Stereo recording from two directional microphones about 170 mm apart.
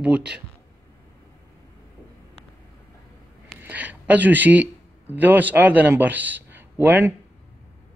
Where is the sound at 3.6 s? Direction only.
10° right (ahead or behind).